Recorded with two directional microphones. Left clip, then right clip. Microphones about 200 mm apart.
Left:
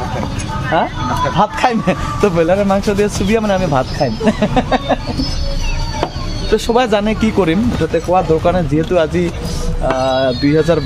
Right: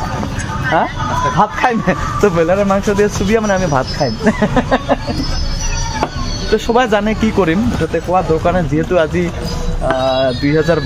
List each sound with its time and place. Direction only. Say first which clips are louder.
1.7 s speech: right 1 dB; 5° left (ahead or behind)
4.6 s a sound: even; 30° right (ahead or behind)
6.5 s speech: even; 5° left (ahead or behind)